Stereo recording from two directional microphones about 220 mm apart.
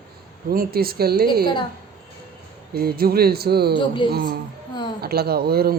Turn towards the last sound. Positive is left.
turn(degrees=-45)  # may be behind; listen again after turning